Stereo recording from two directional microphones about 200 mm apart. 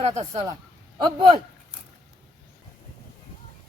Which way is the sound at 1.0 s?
20° right (ahead or behind).